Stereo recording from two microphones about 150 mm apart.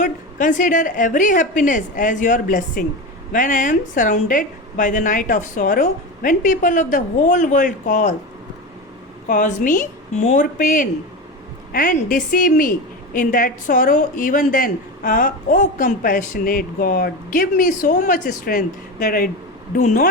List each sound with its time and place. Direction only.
0.0 s a woman's voice: 60° left (ahead or behind)
9.2 s a woman's voice: 60° left (ahead or behind); by 19.3 s 80° left
19.7 s a woman's voice: 55° left (ahead or behind)